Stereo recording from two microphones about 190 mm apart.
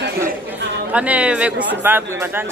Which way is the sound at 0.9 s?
5° right (ahead or behind).